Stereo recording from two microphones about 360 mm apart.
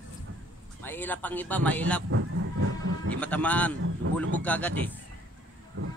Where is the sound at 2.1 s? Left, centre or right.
Right.